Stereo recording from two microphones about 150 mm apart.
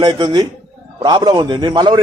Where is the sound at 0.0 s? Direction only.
30° right (ahead or behind).